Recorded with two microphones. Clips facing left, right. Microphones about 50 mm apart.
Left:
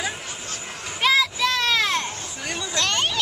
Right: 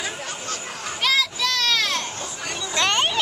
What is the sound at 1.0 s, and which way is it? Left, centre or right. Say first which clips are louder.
Children playing: left 3 dB; centre.